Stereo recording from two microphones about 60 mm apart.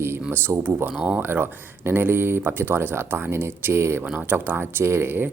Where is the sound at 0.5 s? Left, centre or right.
Right.